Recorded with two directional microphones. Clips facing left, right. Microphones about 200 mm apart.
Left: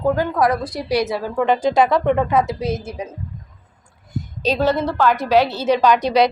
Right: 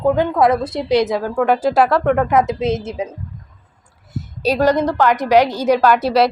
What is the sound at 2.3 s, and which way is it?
Speech, 20° right (ahead or behind).